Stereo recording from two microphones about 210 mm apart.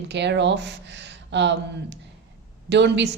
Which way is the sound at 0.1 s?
55° right (ahead or behind).